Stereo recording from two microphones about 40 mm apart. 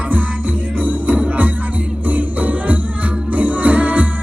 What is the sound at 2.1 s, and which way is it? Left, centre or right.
Jingle bell, right.